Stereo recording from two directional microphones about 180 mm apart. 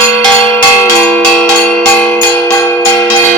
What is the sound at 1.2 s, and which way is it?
Music, 5° left (ahead or behind).